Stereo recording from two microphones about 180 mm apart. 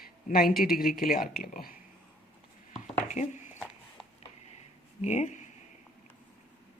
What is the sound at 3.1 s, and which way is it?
Speech, 40° left (ahead or behind).